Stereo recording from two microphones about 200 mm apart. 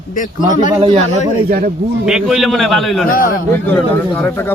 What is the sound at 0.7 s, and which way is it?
Speech, 25° right (ahead or behind).